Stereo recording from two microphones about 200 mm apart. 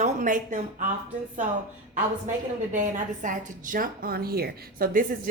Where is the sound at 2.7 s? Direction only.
40° right (ahead or behind).